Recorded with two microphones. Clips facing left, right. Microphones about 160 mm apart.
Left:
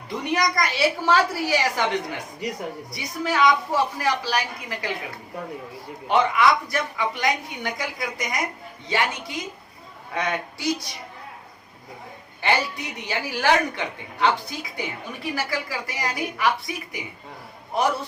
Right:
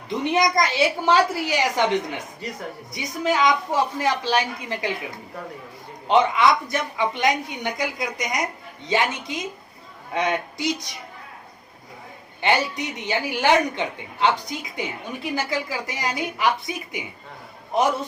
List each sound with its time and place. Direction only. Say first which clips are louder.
0.1 s a woman's voice: right 3 dB; 20° right (ahead or behind)
6.1 s a woman's voice: right 2 dB; 20° right (ahead or behind)
12.4 s a woman's voice: right 2 dB; 20° right (ahead or behind)